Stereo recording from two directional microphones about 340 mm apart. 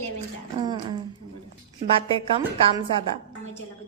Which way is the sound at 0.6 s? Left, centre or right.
Centre.